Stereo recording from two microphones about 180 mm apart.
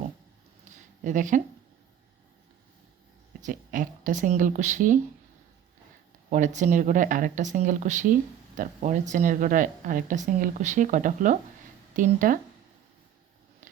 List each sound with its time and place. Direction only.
1.0 s speech: 45° right (ahead or behind)
3.4 s speech: 45° right (ahead or behind)
6.3 s speech: 45° right (ahead or behind)